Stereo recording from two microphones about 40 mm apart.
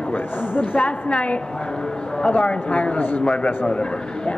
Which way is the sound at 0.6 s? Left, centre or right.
Left.